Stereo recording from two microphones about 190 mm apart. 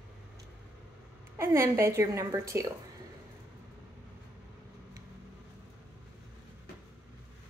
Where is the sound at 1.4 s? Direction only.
15° right (ahead or behind).